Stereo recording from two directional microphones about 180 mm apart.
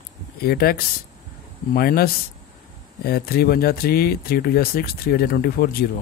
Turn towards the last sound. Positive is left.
turn(degrees=60)  # may be behind; listen again after turning